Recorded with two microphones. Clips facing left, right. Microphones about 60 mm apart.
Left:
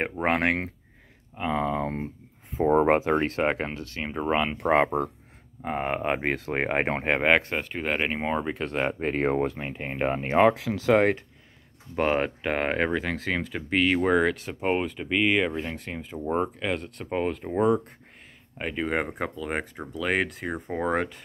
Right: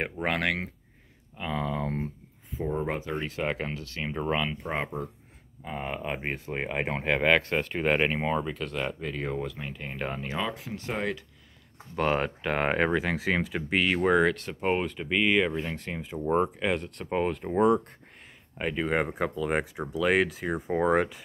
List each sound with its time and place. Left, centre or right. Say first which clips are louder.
0.0 s speech: left 4 dB; left
1.3 s speech: left 5 dB; left
2.6 s speech: left 10 dB; left
3.4 s speech: left 4 dB; left
4.0 s speech: left 3 dB; centre
4.6 s speech: left 10 dB; left
5.6 s speech: left 6 dB; left
7.2 s speech: left 1 dB; left
7.5 s speech: right 2 dB; centre
8.3 s speech: left 2 dB; left
10.5 s speech: left 12 dB; left
11.0 s speech: left 9 dB; left
11.9 s speech: left 2 dB; centre
12.6 s speech: right 2 dB; centre